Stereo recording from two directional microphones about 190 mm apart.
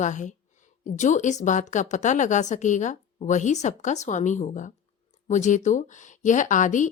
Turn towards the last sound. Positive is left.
turn(degrees=40)  # may be behind; listen again after turning